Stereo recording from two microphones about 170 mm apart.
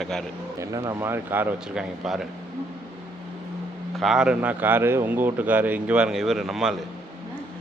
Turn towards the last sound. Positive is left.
turn(degrees=0)  # may be behind; listen again after turning